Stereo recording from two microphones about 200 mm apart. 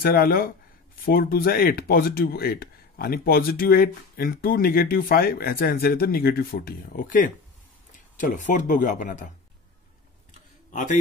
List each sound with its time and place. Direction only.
0.0 s speech: 50° left (ahead or behind)
10.7 s a man's voice: 40° left (ahead or behind)